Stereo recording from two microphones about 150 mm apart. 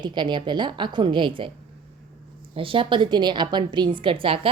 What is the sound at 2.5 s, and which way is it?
A woman's voice, 35° right (ahead or behind).